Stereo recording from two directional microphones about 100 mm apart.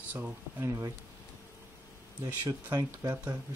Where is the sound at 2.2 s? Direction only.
35° right (ahead or behind).